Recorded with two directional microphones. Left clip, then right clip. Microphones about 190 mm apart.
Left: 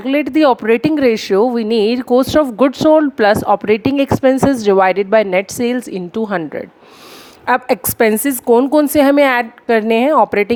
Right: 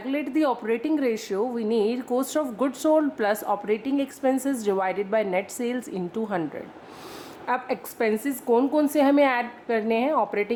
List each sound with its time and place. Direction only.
0.0 s speech: 50° left (ahead or behind)
7.4 s speech: 55° left (ahead or behind)